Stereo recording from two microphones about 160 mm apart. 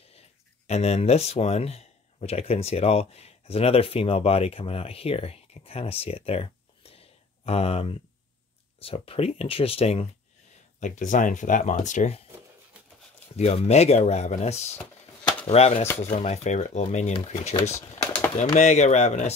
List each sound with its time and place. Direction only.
0.7 s speech: 40° left (ahead or behind)
10.8 s speech: 50° left (ahead or behind)
13.4 s speech: 45° left (ahead or behind)